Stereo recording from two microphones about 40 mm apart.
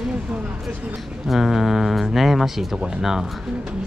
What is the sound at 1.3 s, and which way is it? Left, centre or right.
Speech, centre.